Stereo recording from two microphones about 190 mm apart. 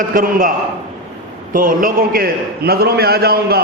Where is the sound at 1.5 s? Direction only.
45° right (ahead or behind).